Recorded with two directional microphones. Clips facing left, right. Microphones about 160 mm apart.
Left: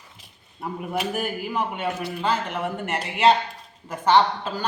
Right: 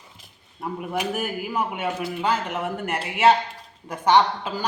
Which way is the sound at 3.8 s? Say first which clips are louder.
Even; 15° right (ahead or behind).